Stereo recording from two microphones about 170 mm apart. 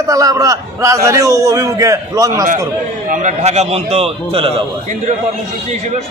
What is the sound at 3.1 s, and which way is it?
A man's voice, 45° right (ahead or behind).